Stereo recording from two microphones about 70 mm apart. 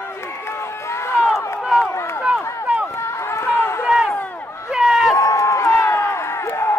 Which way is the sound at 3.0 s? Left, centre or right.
Left.